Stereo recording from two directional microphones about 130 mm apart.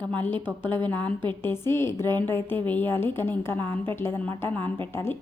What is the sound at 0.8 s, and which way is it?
A woman's voice, 15° left (ahead or behind).